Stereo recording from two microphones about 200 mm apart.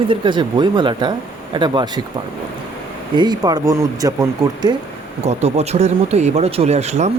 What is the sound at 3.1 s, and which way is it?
Speech, 20° right (ahead or behind).